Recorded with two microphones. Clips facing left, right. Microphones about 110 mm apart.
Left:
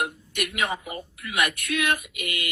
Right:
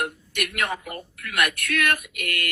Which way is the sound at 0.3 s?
60° right (ahead or behind).